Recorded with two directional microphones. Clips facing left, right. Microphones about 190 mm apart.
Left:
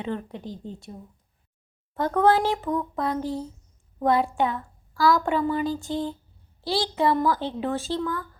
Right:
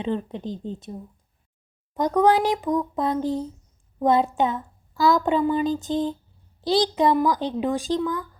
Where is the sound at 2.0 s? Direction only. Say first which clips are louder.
Right 2 dB; 15° right (ahead or behind).